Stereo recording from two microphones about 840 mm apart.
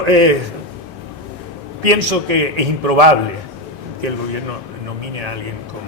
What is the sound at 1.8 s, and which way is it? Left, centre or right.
A man's voice, right.